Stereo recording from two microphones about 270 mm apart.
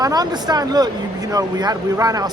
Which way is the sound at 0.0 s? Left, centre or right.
Centre.